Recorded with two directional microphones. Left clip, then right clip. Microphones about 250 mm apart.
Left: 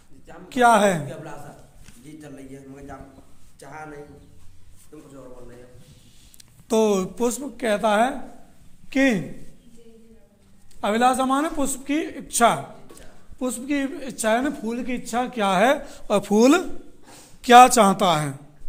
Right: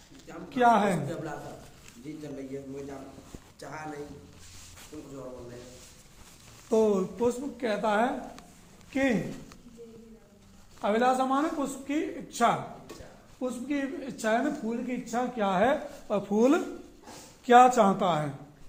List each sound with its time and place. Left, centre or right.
0.5 s speech: left
3.6 s speech: centre
6.7 s speech: left
10.8 s speech: left